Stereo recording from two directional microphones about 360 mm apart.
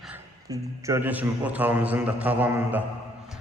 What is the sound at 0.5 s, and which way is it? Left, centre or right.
A man's voice, centre.